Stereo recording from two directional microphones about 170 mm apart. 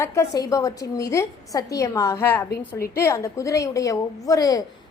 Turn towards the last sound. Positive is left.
turn(degrees=20)  # may be behind; listen again after turning